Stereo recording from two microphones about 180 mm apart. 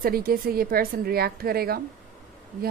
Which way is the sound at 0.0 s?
55° right (ahead or behind).